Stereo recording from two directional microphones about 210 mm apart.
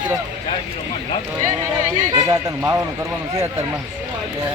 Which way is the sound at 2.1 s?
15° right (ahead or behind).